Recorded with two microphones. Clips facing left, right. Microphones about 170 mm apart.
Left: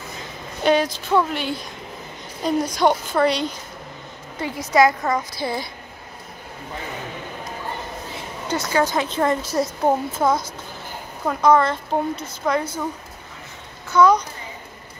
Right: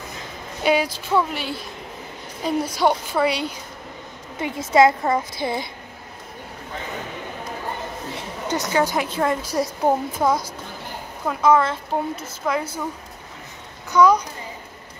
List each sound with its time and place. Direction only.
0.7 s a woman's voice: 10° right (ahead or behind)
4.4 s a woman's voice: 25° right (ahead or behind)
8.5 s a woman's voice: 20° right (ahead or behind)
13.9 s a woman's voice: 10° right (ahead or behind)